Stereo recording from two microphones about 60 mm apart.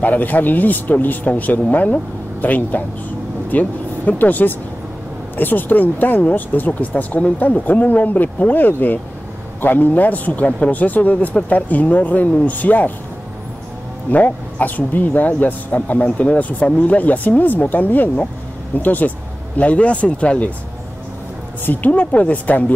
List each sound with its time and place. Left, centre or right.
0.0 s speech: left
14.1 s speech: left
21.6 s speech: left